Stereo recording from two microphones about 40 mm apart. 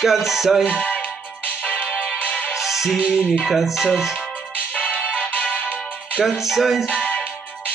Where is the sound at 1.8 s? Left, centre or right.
Centre.